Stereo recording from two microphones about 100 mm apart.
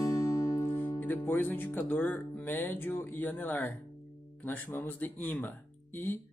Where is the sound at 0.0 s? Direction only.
35° left (ahead or behind).